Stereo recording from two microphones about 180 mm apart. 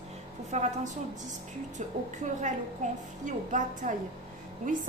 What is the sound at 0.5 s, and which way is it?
Speech, 40° right (ahead or behind).